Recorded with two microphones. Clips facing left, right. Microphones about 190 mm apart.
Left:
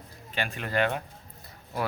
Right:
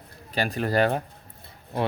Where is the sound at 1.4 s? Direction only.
25° right (ahead or behind).